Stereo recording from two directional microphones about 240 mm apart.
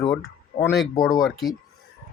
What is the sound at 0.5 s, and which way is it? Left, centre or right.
Speech, left.